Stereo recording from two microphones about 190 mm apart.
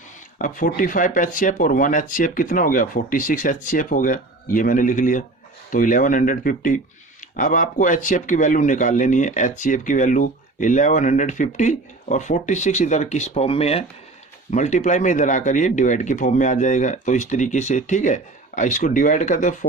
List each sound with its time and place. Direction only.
0.3 s speech: 45° left (ahead or behind)